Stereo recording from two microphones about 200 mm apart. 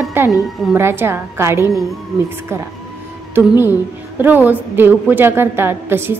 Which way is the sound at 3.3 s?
10° right (ahead or behind).